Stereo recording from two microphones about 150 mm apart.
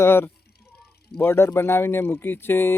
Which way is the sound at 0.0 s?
15° left (ahead or behind).